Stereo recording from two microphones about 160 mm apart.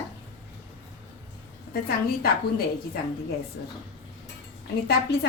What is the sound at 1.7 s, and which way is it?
Speech, 70° left (ahead or behind).